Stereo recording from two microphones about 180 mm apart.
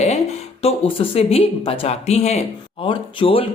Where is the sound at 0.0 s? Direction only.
35° left (ahead or behind).